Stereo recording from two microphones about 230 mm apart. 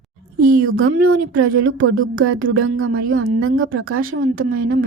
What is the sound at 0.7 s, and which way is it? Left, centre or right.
Speech, right.